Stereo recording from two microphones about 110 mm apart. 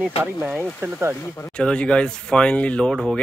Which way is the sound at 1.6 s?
10° left (ahead or behind).